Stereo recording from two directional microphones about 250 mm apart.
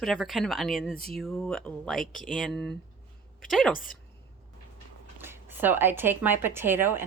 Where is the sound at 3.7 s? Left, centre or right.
Left.